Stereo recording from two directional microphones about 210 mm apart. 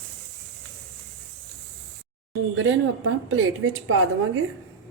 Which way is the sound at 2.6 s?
65° right (ahead or behind).